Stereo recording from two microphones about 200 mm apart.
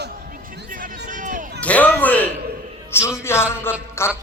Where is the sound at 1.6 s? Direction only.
5° left (ahead or behind).